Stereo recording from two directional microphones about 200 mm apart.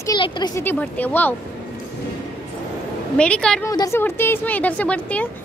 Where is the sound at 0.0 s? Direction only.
20° left (ahead or behind).